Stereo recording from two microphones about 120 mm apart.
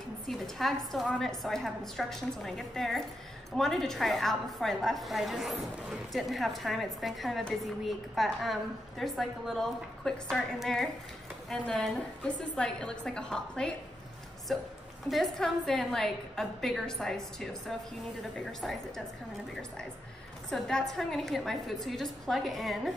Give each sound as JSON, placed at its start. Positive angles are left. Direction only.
{"t": 0.3, "sound": "a woman's voice", "side_deg": 0}
{"t": 20.4, "sound": "a woman's voice", "side_deg": 5}